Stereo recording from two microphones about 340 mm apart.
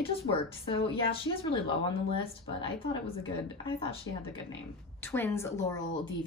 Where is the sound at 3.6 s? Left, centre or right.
Centre.